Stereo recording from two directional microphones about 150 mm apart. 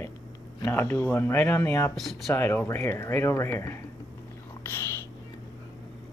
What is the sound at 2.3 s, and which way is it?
Speech, 15° left (ahead or behind).